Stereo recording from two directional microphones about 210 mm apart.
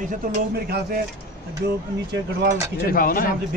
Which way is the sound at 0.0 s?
45° right (ahead or behind).